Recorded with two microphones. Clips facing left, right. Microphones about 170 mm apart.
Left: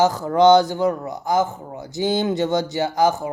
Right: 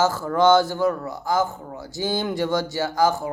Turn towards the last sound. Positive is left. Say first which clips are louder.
# left 2 dB
turn(degrees=20)  # may be behind; listen again after turning